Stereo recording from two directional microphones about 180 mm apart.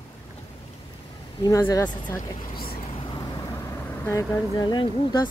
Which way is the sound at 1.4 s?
20° left (ahead or behind).